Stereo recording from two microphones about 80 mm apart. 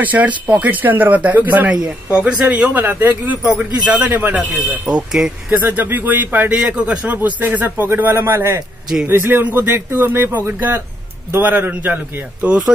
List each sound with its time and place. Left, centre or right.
0.0 s speech: centre
4.8 s speech: centre
5.5 s speech: right